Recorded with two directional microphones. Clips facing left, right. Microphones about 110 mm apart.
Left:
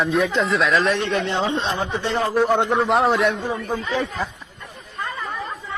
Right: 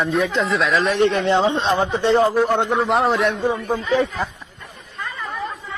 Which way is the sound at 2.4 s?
Centre (ahead or behind).